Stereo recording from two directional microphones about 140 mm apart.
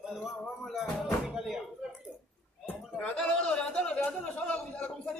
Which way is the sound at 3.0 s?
5° left (ahead or behind).